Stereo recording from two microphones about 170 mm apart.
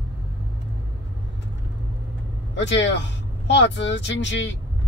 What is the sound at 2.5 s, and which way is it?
Speech, 90° left.